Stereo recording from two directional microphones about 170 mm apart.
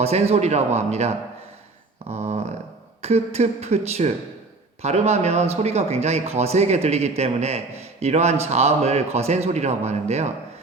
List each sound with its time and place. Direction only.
0.0 s a man's voice: 40° right (ahead or behind)
3.0 s a man's voice: 40° right (ahead or behind)